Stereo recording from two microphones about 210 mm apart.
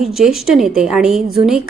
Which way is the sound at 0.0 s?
Centre (ahead or behind).